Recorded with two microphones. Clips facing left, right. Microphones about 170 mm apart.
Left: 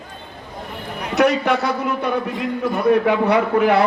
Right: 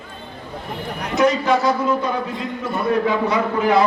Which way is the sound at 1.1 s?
65° left (ahead or behind).